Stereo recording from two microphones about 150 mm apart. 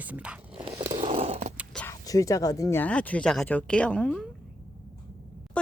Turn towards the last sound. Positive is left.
turn(degrees=5)  # may be behind; listen again after turning